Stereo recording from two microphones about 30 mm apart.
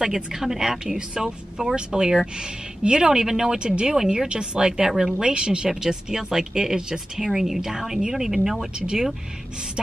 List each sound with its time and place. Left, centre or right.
0.0 s a woman's voice: centre
1.8 s speech: right
3.1 s speech: centre
3.5 s speech: right
3.8 s a woman's voice: centre
4.1 s speech: right
5.2 s speech: right
5.7 s speech: centre
7.2 s a woman's voice: centre
8.7 s speech: right